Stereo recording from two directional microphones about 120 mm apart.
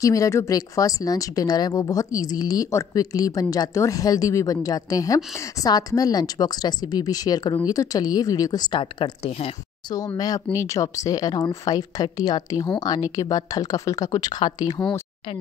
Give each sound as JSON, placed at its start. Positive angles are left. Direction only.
{"t": 0.0, "sound": "speech", "side_deg": 30}
{"t": 9.9, "sound": "speech", "side_deg": 30}